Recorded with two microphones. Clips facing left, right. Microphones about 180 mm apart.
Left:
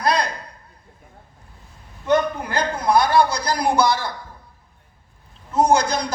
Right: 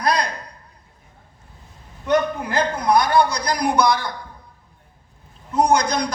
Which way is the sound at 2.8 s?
30° left (ahead or behind).